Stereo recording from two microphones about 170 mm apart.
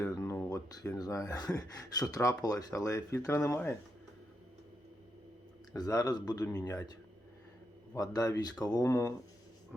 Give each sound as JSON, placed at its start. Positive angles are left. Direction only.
{"t": 0.1, "sound": "speech", "side_deg": 15}
{"t": 5.7, "sound": "speech", "side_deg": 20}
{"t": 7.9, "sound": "speech", "side_deg": 20}